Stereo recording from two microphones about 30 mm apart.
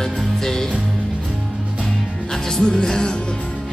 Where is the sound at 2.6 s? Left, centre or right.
Left.